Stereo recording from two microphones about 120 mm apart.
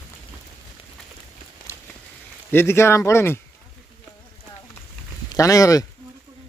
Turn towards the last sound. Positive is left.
turn(degrees=30)  # may be behind; listen again after turning